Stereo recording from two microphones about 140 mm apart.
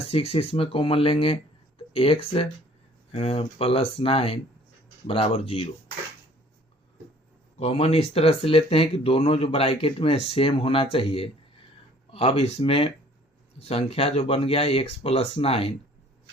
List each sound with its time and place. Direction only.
0.0 s speech: 45° left (ahead or behind)
7.6 s speech: 45° left (ahead or behind)